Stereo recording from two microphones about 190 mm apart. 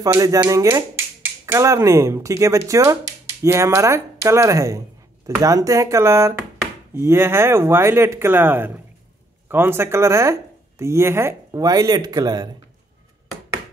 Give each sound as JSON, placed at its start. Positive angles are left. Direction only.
{"t": 0.0, "sound": "speech", "side_deg": -15}